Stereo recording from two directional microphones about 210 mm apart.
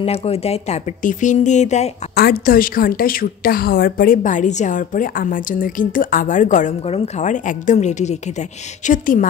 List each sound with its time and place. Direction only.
0.0 s a woman's voice: 30° left (ahead or behind)
2.1 s a woman's voice: 45° left (ahead or behind)